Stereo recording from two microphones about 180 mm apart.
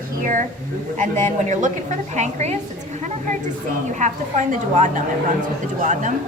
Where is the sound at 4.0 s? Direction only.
45° right (ahead or behind).